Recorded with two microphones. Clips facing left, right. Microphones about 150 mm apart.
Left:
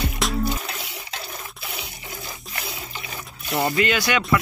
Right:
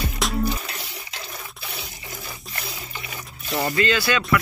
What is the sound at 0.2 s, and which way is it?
Music, centre (ahead or behind).